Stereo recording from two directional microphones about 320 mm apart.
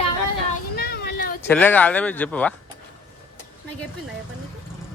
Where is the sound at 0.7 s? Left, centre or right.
Left.